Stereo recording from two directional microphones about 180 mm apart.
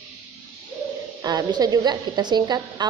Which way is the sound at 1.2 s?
20° right (ahead or behind).